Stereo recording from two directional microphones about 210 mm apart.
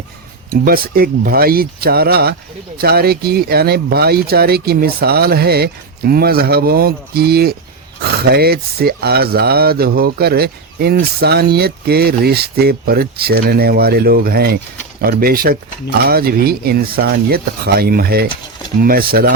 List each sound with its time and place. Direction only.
0.5 s speech: 45° right (ahead or behind)